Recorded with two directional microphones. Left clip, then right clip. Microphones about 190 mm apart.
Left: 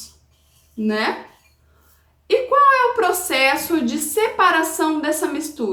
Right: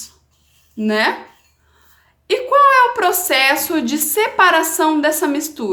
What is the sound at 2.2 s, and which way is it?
A woman's voice, 50° right (ahead or behind).